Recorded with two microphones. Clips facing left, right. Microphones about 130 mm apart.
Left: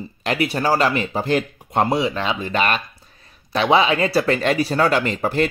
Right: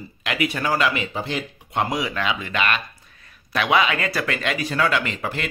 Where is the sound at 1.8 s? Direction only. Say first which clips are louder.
Left 4 dB; 30° left (ahead or behind).